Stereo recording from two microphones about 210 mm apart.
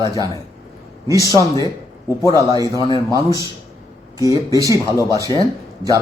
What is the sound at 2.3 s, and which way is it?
Speech, 15° right (ahead or behind).